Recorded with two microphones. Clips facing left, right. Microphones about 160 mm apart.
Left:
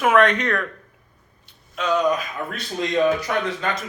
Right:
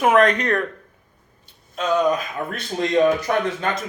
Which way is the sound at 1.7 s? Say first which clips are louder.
Right 1 dB; 40° right (ahead or behind).